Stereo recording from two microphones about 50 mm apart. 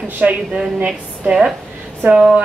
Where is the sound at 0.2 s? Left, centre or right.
Right.